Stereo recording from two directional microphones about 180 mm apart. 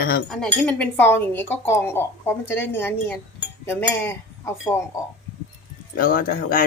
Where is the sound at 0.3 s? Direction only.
5° left (ahead or behind).